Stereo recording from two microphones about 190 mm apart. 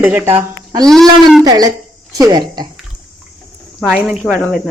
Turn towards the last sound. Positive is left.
turn(degrees=-5)  # may be behind; listen again after turning